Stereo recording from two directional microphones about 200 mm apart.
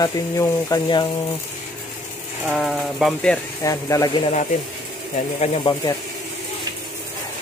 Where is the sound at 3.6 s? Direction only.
15° left (ahead or behind).